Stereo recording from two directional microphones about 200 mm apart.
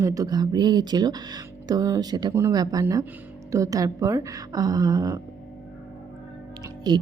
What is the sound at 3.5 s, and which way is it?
A woman's voice, 15° right (ahead or behind).